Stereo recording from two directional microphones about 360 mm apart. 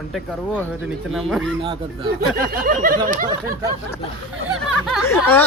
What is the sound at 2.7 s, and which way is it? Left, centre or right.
Snicker, right.